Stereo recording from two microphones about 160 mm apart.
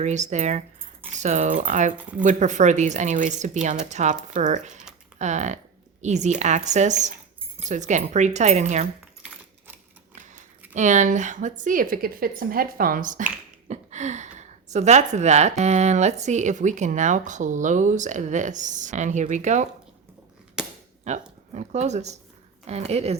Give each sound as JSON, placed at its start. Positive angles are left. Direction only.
{"t": 0.0, "sound": "speech", "side_deg": -45}
{"t": 10.8, "sound": "speech", "side_deg": -50}
{"t": 20.6, "sound": "cap gun", "side_deg": -5}
{"t": 21.0, "sound": "a woman's voice", "side_deg": -45}